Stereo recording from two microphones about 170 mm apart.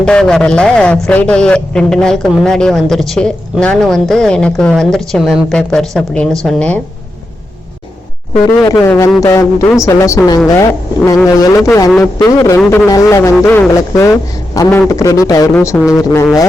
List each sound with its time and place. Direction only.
0.0 s speech: 5° left (ahead or behind)
8.6 s a man's voice: 20° left (ahead or behind)